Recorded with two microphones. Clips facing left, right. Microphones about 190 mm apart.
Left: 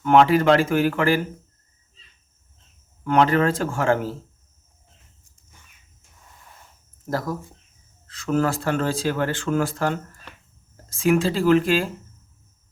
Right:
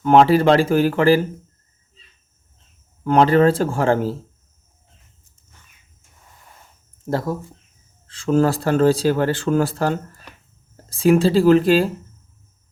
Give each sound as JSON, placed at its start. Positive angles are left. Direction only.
{"t": 0.0, "sound": "speech", "side_deg": -35}
{"t": 3.0, "sound": "speech", "side_deg": -35}
{"t": 7.0, "sound": "speech", "side_deg": -25}